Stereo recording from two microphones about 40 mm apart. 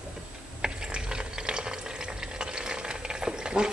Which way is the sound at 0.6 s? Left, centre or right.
Right.